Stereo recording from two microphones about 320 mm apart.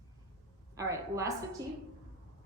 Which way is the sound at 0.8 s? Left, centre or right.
Centre.